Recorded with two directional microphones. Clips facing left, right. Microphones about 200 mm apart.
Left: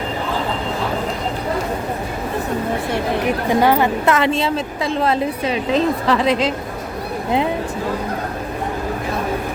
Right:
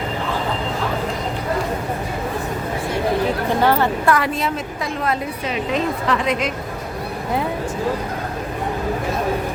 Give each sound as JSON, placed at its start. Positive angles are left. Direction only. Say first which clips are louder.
{"t": 3.5, "sound": "a woman's voice", "louder": "left 4 dB", "side_deg": 15}